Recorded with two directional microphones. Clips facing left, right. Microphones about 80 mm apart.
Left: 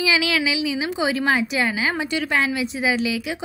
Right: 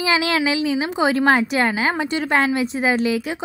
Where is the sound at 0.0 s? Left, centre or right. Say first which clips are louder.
Right 2 dB; right.